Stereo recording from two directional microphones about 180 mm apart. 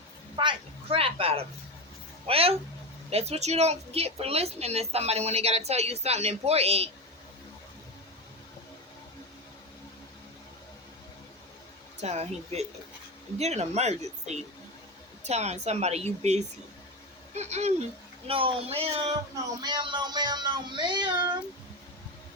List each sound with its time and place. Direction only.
0.3 s a sound: 30° right (ahead or behind)
2.2 s speech: 35° right (ahead or behind)
11.9 s speech: 35° right (ahead or behind)